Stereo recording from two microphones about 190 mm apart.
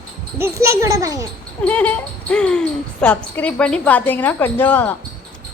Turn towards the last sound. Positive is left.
turn(degrees=10)  # may be behind; listen again after turning